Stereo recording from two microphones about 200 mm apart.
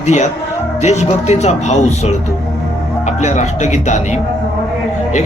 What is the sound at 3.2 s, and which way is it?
Speech, 35° left (ahead or behind).